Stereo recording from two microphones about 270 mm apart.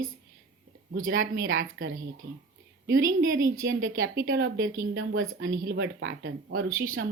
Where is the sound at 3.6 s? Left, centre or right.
Right.